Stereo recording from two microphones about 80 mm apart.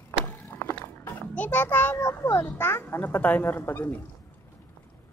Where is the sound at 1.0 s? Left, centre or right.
Centre.